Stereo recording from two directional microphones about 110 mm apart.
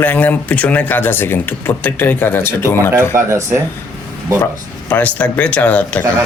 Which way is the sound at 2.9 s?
25° right (ahead or behind).